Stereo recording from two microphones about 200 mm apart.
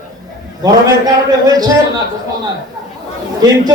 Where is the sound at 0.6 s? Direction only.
20° right (ahead or behind).